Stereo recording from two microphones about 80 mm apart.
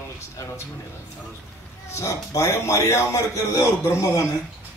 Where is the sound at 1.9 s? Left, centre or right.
Left.